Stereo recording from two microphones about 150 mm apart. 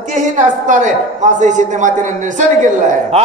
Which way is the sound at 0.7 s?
55° right (ahead or behind).